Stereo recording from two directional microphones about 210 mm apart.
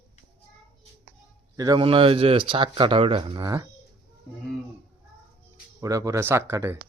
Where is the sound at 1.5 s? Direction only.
15° right (ahead or behind).